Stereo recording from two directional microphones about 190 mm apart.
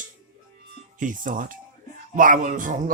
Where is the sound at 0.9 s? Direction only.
45° right (ahead or behind).